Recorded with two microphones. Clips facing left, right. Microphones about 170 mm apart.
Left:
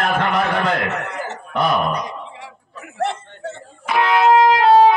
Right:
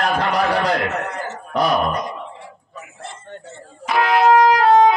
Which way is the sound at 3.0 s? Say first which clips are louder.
Left 13 dB; 70° left (ahead or behind).